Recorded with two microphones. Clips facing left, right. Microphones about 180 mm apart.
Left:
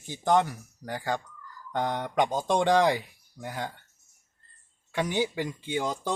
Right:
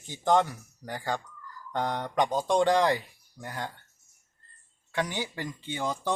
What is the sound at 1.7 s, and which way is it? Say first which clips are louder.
Speech: left 1 dB; 15° left (ahead or behind).